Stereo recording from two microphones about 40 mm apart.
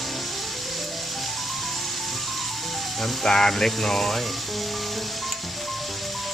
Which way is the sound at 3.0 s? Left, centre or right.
Centre.